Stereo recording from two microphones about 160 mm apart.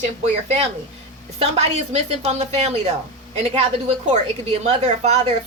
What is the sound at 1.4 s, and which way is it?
A woman's voice, 40° right (ahead or behind).